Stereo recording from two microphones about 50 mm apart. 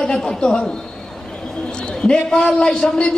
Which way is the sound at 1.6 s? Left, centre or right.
Centre.